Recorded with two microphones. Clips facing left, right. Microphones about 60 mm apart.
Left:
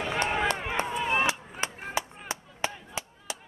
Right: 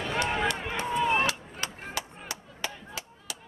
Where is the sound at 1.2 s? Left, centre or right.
Left.